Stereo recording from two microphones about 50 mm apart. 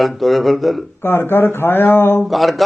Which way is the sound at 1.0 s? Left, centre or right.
Left.